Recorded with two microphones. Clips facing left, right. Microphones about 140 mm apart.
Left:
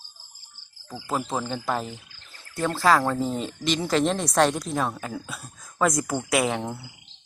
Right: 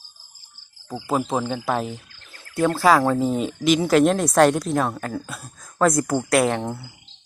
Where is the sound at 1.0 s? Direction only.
15° right (ahead or behind).